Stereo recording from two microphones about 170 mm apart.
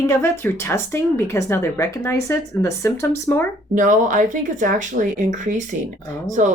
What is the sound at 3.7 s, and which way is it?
Speech, 50° right (ahead or behind).